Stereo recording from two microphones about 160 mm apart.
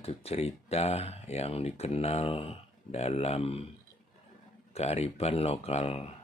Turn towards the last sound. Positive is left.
turn(degrees=40)  # may be behind; listen again after turning